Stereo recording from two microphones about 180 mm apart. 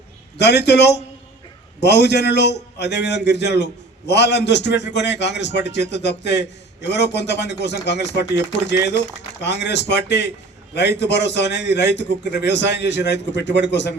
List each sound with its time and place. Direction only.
0.3 s a man's voice: 70° left (ahead or behind)
9.4 s a man's voice: 70° left (ahead or behind)